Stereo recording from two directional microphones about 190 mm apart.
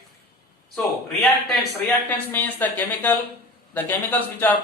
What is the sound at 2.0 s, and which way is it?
Speech, 10° left (ahead or behind).